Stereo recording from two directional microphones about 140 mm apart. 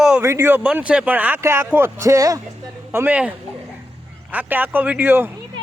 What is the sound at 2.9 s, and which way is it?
Speech, 10° right (ahead or behind).